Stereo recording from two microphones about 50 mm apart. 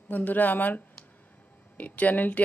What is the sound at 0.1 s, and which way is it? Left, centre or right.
Speech, left.